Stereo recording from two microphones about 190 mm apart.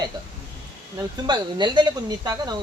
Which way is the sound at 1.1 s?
25° right (ahead or behind).